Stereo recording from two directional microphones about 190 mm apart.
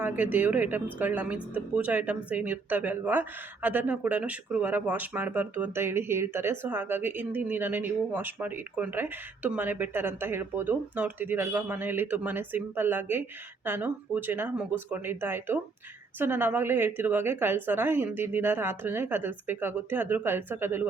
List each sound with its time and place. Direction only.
0.0 s a woman's voice: 10° right (ahead or behind)